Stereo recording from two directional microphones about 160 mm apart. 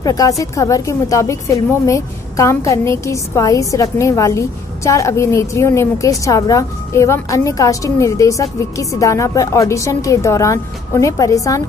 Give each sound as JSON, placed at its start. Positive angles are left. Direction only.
{"t": 0.0, "sound": "a woman's voice", "side_deg": 25}